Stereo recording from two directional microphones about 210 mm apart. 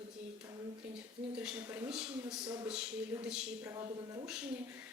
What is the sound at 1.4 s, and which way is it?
Speech, 5° right (ahead or behind).